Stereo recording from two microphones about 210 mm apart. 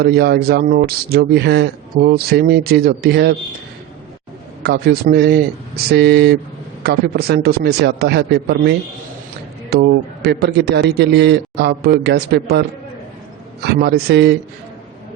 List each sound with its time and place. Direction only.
0.0 s a man's voice: 50° right (ahead or behind)
4.6 s a man's voice: 45° right (ahead or behind)
9.7 s a man's voice: 50° right (ahead or behind)
13.7 s a man's voice: 50° right (ahead or behind)